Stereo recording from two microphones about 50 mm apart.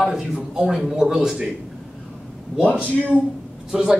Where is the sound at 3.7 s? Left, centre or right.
Centre.